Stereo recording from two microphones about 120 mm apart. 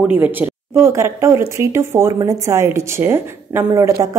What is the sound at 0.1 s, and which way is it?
A woman's voice, 15° right (ahead or behind).